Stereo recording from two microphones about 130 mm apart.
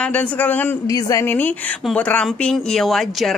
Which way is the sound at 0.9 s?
25° left (ahead or behind).